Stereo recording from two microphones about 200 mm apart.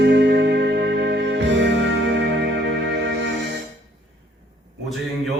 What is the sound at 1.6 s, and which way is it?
Music, 65° right (ahead or behind).